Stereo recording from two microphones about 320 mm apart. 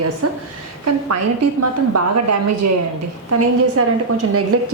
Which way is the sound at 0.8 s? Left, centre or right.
Right.